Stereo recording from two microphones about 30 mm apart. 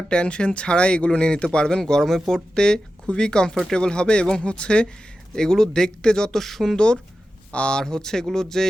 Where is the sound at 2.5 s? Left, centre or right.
Left.